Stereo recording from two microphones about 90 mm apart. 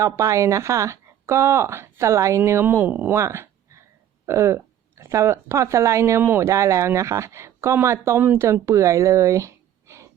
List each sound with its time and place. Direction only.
0.0 s speech: 35° right (ahead or behind); by 3.1 s 20° right (ahead or behind)
3.1 s a sound: 30° right (ahead or behind)
4.3 s speech: 30° right (ahead or behind)
6.1 s speech: 20° right (ahead or behind)
6.5 s speech: 35° right (ahead or behind)